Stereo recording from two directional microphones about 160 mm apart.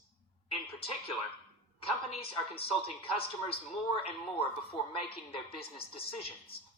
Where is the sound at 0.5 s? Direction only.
40° left (ahead or behind).